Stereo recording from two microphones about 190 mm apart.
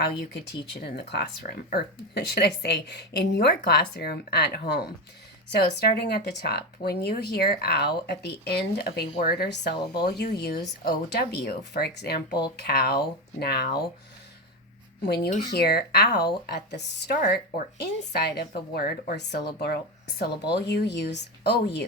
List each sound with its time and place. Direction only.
0.0 s speech: 60° left (ahead or behind)
15.0 s speech: 60° left (ahead or behind)